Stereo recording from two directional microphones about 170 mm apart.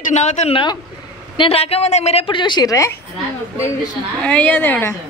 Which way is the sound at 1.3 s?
30° left (ahead or behind).